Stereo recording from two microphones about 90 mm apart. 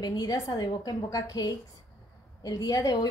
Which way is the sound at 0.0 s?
45° left (ahead or behind).